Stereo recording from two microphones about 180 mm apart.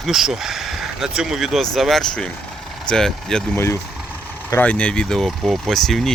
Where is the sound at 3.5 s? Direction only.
15° left (ahead or behind).